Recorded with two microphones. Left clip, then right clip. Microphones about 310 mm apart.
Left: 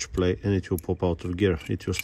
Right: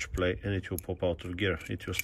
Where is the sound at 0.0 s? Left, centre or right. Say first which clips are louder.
Left 5 dB; centre.